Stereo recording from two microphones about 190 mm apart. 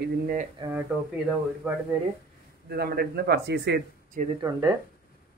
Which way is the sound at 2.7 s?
55° right (ahead or behind).